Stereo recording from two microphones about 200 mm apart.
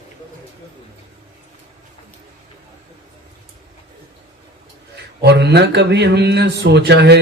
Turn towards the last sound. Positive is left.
turn(degrees=-55)  # may be behind; listen again after turning